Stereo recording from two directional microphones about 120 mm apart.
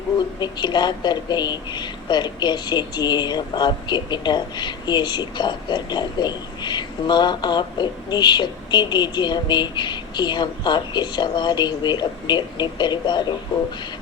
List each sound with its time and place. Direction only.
0.3 s a woman's voice: 35° left (ahead or behind)